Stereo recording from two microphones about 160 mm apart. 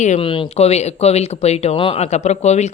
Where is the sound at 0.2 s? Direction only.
35° left (ahead or behind).